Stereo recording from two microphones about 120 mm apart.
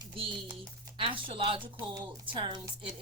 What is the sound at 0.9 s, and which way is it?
A woman's voice, 45° right (ahead or behind).